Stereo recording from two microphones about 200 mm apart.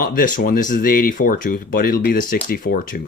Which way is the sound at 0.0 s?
45° left (ahead or behind).